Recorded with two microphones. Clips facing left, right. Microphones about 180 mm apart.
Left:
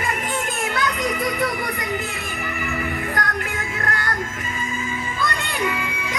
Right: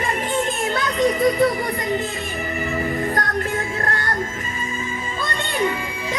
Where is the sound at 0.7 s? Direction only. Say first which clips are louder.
Right 5 dB; 30° right (ahead or behind).